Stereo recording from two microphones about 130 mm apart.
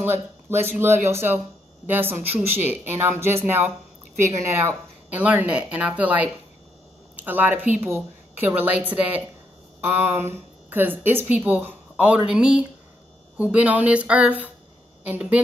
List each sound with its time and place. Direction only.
0.0 s a woman's voice: 15° right (ahead or behind)